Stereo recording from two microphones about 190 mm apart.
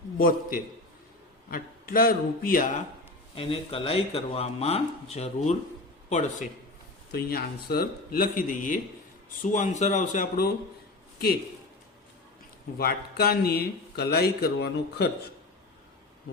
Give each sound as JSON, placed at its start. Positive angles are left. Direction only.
{"t": 0.2, "sound": "a man's voice", "side_deg": 50}
{"t": 3.3, "sound": "speech", "side_deg": 30}
{"t": 7.1, "sound": "a man's voice", "side_deg": 55}
{"t": 12.8, "sound": "speech", "side_deg": 55}